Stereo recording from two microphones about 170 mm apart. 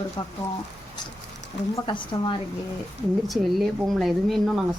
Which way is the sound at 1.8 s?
30° left (ahead or behind).